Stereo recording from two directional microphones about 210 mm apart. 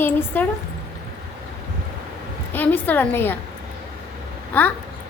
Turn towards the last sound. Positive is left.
turn(degrees=10)  # may be behind; listen again after turning